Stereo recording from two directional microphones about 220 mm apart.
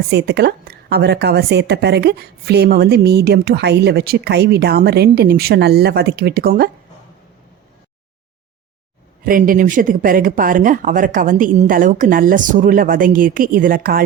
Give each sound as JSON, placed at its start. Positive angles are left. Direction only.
{"t": 0.1, "sound": "a woman's voice", "side_deg": -50}
{"t": 9.2, "sound": "speech", "side_deg": -40}